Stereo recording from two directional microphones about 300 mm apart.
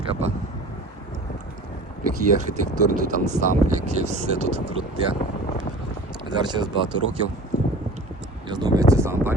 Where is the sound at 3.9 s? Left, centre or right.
Right.